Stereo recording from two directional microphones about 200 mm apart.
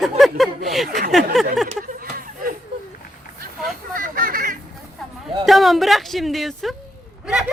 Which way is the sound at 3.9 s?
45° right (ahead or behind).